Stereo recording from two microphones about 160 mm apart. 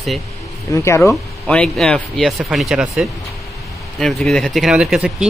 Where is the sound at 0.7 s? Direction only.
20° left (ahead or behind).